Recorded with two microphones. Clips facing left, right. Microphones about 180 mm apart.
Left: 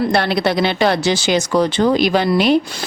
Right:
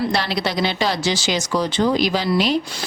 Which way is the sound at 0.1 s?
55° left (ahead or behind).